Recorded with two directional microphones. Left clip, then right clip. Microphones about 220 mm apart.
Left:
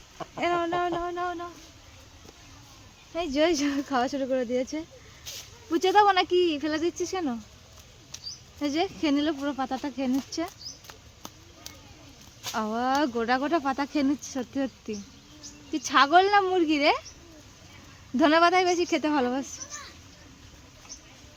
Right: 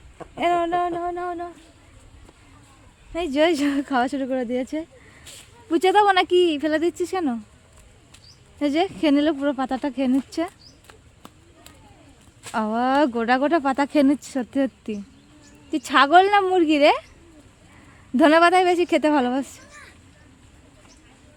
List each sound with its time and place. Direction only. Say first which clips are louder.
0.3 s speech: right 6 dB; 40° right (ahead or behind)
0.9 s a sound: right 3 dB; 25° right (ahead or behind)
3.1 s speech: right 5 dB; 45° right (ahead or behind)
5.3 s a sound: left 4 dB; 10° right (ahead or behind)
5.7 s speech: right 4 dB; 50° right (ahead or behind)
8.5 s speech: right 6 dB; 45° right (ahead or behind)
10.8 s a sound: left 2 dB; centre (ahead or behind)
12.5 s speech: right 6 dB; 45° right (ahead or behind)
18.2 s speech: right 5 dB; 45° right (ahead or behind)